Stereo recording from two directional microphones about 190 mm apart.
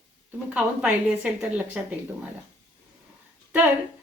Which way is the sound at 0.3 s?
5° right (ahead or behind).